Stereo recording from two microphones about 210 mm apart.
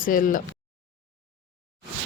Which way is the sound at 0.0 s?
40° left (ahead or behind).